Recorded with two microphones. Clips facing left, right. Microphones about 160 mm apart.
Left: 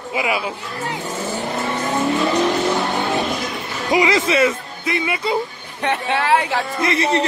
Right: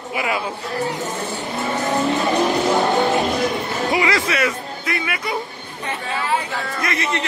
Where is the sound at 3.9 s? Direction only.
20° left (ahead or behind).